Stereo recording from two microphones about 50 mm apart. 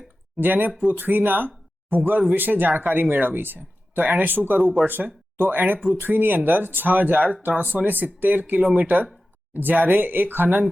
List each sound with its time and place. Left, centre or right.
0.3 s speech: right